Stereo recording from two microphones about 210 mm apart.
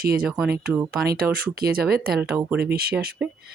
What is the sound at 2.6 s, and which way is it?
Speech, 45° right (ahead or behind).